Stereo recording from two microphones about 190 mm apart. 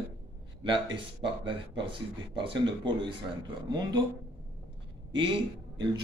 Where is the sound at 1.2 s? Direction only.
25° right (ahead or behind).